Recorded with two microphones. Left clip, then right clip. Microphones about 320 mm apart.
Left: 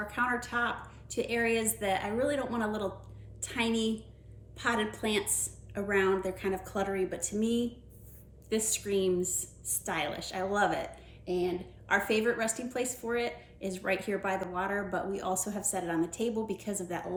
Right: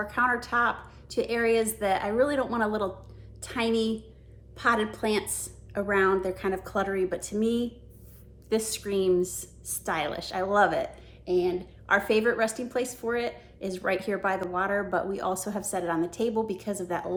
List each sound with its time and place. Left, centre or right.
0.1 s a woman's voice: centre